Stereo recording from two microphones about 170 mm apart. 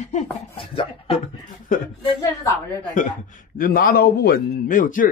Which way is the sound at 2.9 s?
50° left (ahead or behind).